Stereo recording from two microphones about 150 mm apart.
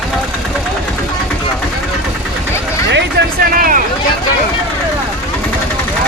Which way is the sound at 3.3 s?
70° right (ahead or behind).